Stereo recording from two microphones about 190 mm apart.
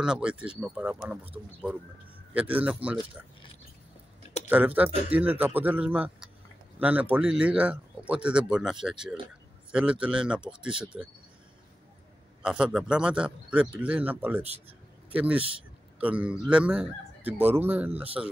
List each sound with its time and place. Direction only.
0.0 s speech: 5° right (ahead or behind)
4.5 s speech: 10° right (ahead or behind)
10.7 s speech: 25° right (ahead or behind)
12.4 s speech: 5° right (ahead or behind)